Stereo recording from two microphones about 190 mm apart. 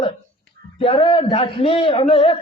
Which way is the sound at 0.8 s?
30° left (ahead or behind).